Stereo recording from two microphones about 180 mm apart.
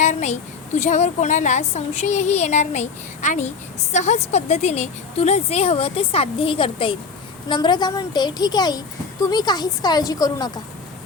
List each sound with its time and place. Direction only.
0.0 s a woman's voice: 40° left (ahead or behind); by 10.5 s 20° left (ahead or behind)